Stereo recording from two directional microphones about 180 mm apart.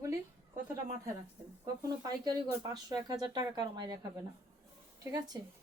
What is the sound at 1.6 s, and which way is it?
Speech, 20° right (ahead or behind).